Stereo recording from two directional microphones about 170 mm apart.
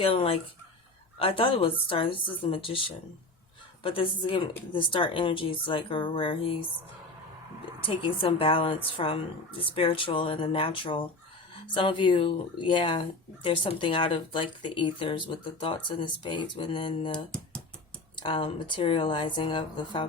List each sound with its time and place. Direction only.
0.0 s a woman's voice: 35° left (ahead or behind)
3.8 s speech: 30° left (ahead or behind)
7.9 s a woman's voice: 30° left (ahead or behind)